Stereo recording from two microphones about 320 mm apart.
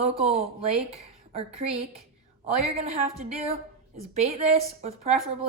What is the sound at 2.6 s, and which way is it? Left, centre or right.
A woman's voice, centre.